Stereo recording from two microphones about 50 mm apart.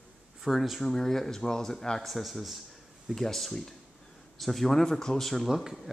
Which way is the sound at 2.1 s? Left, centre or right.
Centre.